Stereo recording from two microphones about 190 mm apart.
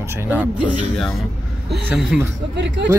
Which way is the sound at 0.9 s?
Centre (ahead or behind).